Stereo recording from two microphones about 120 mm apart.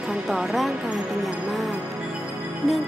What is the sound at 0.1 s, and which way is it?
Speech, 5° right (ahead or behind).